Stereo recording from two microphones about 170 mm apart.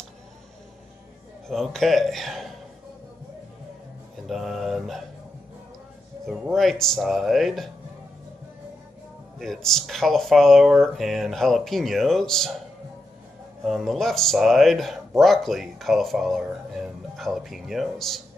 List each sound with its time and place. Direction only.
1.5 s speech: centre (ahead or behind)
4.3 s speech: centre (ahead or behind)
6.2 s speech: 5° right (ahead or behind)
9.4 s speech: centre (ahead or behind)
13.7 s speech: centre (ahead or behind)